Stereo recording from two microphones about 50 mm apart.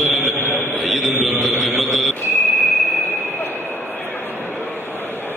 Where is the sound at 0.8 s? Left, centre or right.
Centre.